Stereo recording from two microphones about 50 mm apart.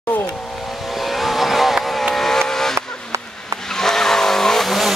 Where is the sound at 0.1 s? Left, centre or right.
Left.